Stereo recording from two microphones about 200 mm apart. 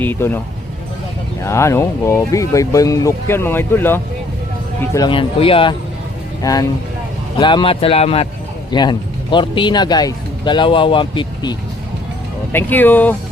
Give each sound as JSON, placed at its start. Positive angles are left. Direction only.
{"t": 0.0, "sound": "speech", "side_deg": 10}
{"t": 1.5, "sound": "speech", "side_deg": 15}
{"t": 4.8, "sound": "speech", "side_deg": 20}
{"t": 12.5, "sound": "speech", "side_deg": 10}